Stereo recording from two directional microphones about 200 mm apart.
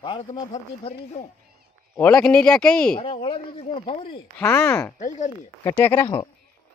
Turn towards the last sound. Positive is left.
turn(degrees=10)  # may be behind; listen again after turning